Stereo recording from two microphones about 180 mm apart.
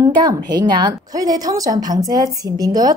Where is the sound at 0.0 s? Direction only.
20° right (ahead or behind).